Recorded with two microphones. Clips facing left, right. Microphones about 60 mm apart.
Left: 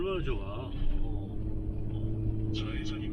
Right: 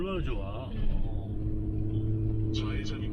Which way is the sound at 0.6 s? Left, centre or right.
Right.